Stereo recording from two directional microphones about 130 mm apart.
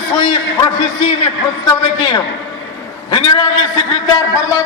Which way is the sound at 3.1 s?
35° left (ahead or behind).